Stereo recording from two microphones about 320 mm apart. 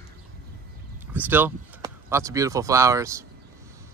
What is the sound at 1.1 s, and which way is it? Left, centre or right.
Speech, centre.